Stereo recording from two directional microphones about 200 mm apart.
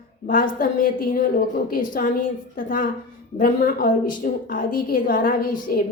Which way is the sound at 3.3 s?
45° left (ahead or behind).